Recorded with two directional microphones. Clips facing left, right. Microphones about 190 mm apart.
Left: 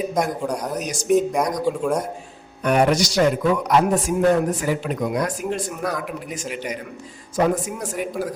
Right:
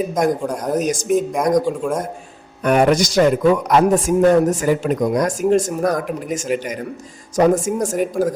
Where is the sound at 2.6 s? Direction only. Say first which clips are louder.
Right 3 dB; 50° right (ahead or behind).